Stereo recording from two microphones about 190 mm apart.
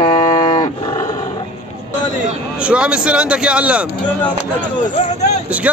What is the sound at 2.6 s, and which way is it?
A man's voice, 5° right (ahead or behind).